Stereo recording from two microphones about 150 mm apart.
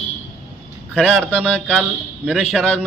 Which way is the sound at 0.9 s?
5° left (ahead or behind).